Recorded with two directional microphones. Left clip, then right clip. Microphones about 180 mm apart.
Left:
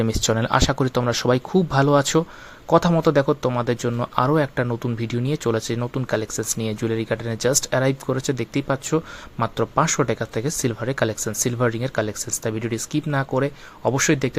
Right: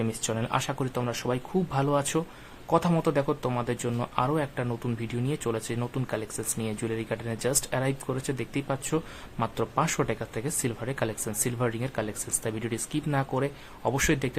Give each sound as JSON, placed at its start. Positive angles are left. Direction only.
{"t": 0.0, "sound": "speech", "side_deg": 35}